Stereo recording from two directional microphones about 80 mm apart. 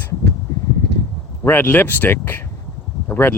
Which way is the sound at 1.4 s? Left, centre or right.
Left.